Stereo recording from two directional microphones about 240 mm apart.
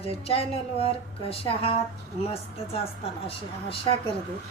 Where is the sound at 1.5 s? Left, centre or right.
Left.